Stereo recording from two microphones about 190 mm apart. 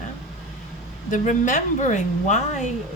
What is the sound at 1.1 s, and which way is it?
A woman's voice, 40° left (ahead or behind).